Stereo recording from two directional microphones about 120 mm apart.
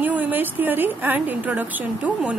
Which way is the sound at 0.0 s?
15° right (ahead or behind).